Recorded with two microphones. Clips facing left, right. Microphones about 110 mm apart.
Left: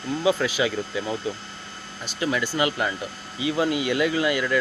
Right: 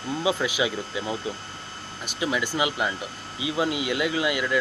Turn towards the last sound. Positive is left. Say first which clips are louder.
# left 2 dB
turn(degrees=-10)  # may be behind; listen again after turning